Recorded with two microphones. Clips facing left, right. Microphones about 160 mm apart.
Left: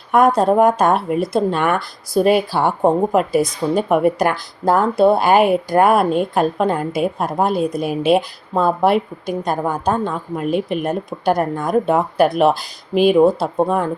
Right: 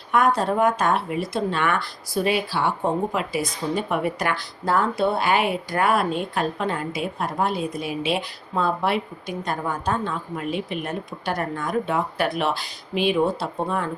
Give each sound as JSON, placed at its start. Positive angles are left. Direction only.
{"t": 0.1, "sound": "speech", "side_deg": 45}